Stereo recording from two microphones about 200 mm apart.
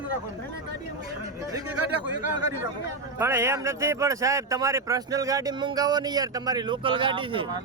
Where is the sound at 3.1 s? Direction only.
10° right (ahead or behind).